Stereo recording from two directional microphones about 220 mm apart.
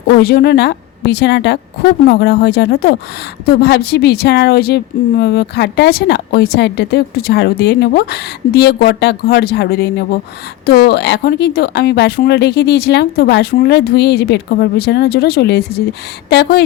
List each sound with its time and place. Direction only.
0.2 s a woman's voice: 45° left (ahead or behind)